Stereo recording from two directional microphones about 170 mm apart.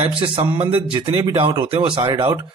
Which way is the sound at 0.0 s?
30° right (ahead or behind).